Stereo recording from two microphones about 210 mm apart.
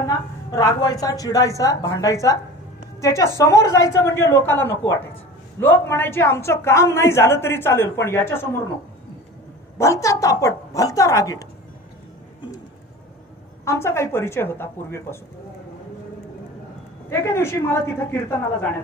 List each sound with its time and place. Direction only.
0.0 s a woman's voice: 15° left (ahead or behind)
9.8 s a woman's voice: 15° left (ahead or behind)
13.7 s a woman's voice: 10° left (ahead or behind)
17.1 s a woman's voice: 10° left (ahead or behind)